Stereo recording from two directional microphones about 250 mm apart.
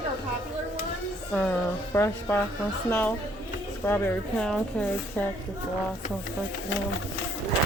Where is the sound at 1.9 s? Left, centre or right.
Centre.